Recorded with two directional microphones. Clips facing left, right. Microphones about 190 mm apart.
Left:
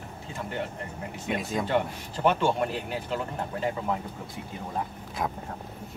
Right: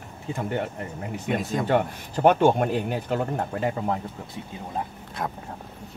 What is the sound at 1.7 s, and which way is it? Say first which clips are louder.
Speech: right 6 dB; 50° right (ahead or behind).